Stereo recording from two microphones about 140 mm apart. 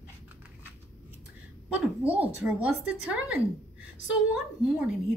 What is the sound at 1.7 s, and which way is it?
A woman's voice, 10° right (ahead or behind).